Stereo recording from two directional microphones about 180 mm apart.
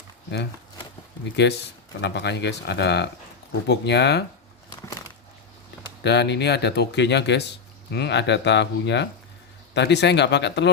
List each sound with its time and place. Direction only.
1.4 s speech: 75° left (ahead or behind)
6.0 s speech: 70° left (ahead or behind)